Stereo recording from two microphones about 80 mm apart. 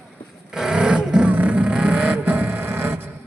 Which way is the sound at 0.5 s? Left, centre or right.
Centre.